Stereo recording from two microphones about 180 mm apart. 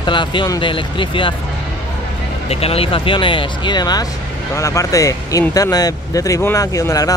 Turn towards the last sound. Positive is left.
turn(degrees=20)  # may be behind; listen again after turning